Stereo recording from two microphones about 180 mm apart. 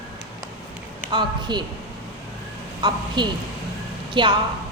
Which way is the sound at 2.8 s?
25° right (ahead or behind).